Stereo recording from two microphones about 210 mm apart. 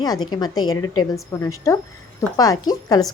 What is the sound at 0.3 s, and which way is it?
A woman's voice, 20° left (ahead or behind).